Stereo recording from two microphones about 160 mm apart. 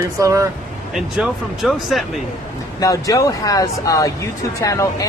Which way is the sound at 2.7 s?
20° left (ahead or behind).